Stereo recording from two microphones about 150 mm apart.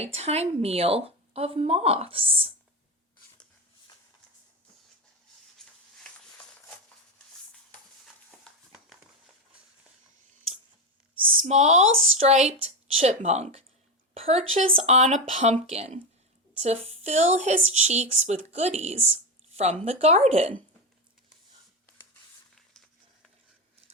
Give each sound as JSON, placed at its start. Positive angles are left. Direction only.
{"t": 0.0, "sound": "speech", "side_deg": -45}
{"t": 8.4, "sound": "a sound", "side_deg": 0}
{"t": 11.4, "sound": "a woman's voice", "side_deg": -50}